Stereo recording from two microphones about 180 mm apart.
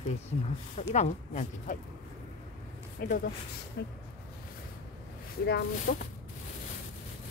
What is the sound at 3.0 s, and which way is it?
Speech, 55° left (ahead or behind).